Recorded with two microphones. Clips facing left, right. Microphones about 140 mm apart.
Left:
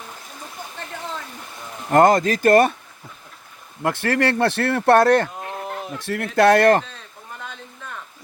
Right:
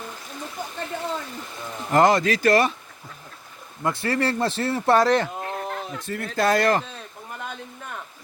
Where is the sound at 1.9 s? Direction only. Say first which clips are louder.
Left 3 dB; 50° left (ahead or behind).